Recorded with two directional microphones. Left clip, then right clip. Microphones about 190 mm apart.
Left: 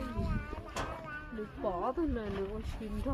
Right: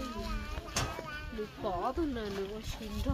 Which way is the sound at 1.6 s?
45° left (ahead or behind).